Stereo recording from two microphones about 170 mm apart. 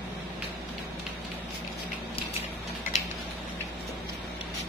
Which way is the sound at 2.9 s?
45° left (ahead or behind).